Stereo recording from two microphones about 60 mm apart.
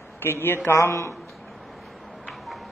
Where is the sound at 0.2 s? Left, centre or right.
Left.